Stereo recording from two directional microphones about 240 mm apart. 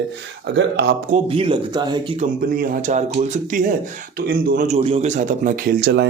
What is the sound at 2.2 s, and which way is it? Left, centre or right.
Speech, right.